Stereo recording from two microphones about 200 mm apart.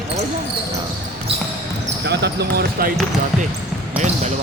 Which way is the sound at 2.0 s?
55° right (ahead or behind).